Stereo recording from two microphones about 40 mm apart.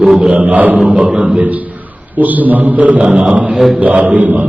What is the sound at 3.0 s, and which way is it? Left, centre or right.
Speech, right.